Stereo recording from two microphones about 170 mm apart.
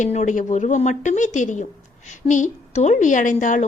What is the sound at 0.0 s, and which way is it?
A woman's voice, 45° left (ahead or behind).